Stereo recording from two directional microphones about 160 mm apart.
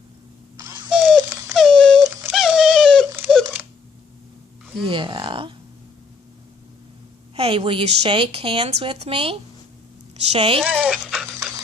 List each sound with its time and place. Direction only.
0.9 s dog: 5° right (ahead or behind)
3.2 s a sound: 5° right (ahead or behind)
4.9 s speech: 30° right (ahead or behind)
7.3 s a woman's voice: 35° right (ahead or behind)
10.6 s speech: 5° right (ahead or behind)